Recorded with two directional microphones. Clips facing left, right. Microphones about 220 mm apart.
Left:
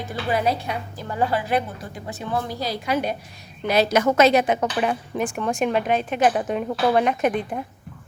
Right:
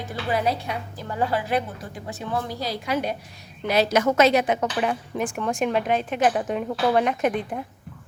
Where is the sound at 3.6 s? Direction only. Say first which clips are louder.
Left 2 dB; 45° left (ahead or behind).